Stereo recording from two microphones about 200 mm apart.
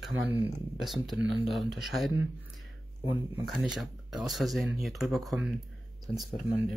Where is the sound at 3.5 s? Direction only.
Centre (ahead or behind).